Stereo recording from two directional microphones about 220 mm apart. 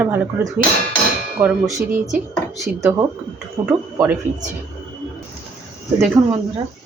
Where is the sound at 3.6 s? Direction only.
20° right (ahead or behind).